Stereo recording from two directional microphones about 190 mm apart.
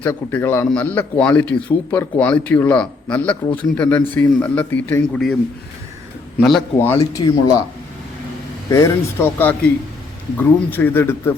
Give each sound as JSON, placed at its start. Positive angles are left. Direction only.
{"t": 0.0, "sound": "a man's voice", "side_deg": 10}
{"t": 6.4, "sound": "a man's voice", "side_deg": 5}
{"t": 8.7, "sound": "a man's voice", "side_deg": 15}